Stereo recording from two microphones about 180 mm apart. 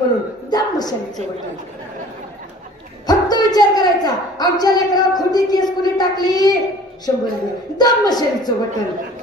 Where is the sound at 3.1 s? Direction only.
20° left (ahead or behind).